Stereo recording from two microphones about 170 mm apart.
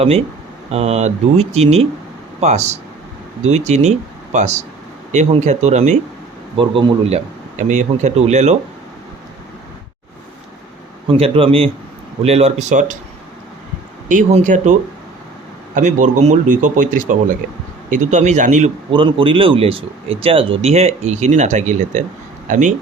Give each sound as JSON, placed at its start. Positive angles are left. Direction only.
{"t": 0.7, "sound": "speech", "side_deg": -40}
{"t": 6.6, "sound": "speech", "side_deg": -30}
{"t": 7.6, "sound": "speech", "side_deg": -45}
{"t": 11.2, "sound": "speech", "side_deg": -30}
{"t": 14.1, "sound": "speech", "side_deg": -50}
{"t": 18.9, "sound": "speech", "side_deg": -30}